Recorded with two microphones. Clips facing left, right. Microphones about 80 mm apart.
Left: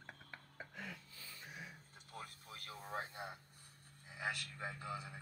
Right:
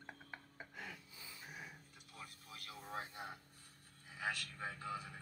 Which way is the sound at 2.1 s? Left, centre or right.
Left.